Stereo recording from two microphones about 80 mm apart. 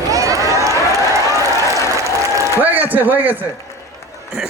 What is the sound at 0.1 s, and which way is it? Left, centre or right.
Run, right.